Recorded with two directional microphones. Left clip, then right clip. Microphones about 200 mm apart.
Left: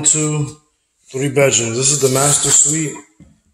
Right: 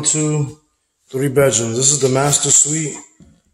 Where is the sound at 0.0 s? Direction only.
25° right (ahead or behind); by 2.2 s 5° right (ahead or behind).